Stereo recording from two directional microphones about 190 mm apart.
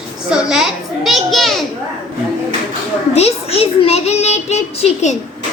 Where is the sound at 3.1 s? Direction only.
30° left (ahead or behind).